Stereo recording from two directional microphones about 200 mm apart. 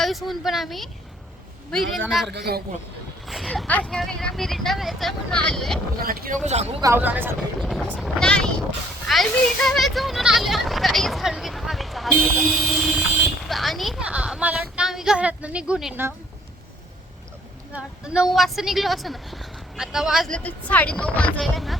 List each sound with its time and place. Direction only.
0.0 s speech: centre (ahead or behind)
2.0 s speech: centre (ahead or behind)
2.3 s a man's voice: 55° right (ahead or behind)
3.2 s speech: centre (ahead or behind)
6.0 s speech: 45° right (ahead or behind)
6.8 s speech: 10° right (ahead or behind)
7.6 s speech: 5° left (ahead or behind)
17.7 s speech: 5° right (ahead or behind)